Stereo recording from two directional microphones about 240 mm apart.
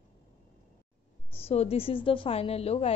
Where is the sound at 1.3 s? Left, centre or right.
Left.